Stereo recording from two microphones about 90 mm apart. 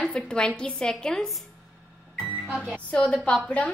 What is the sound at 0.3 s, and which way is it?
A woman's voice, 10° left (ahead or behind).